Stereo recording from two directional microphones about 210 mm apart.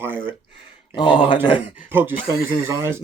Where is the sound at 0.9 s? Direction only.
20° left (ahead or behind).